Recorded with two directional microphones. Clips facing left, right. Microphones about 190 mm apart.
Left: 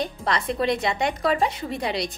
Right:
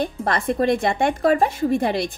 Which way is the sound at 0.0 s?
50° right (ahead or behind).